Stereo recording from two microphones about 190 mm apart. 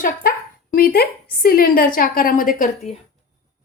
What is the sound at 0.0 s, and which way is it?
Speech, 50° left (ahead or behind).